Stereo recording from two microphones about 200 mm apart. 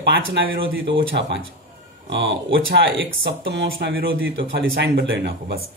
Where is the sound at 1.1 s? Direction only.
60° right (ahead or behind).